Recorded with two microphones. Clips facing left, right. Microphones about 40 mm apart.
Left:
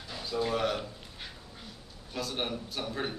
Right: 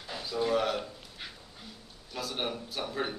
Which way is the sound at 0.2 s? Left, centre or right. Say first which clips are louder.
Right 1 dB; centre.